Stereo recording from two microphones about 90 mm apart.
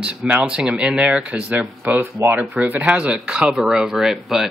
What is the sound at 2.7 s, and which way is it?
Speech, 15° right (ahead or behind).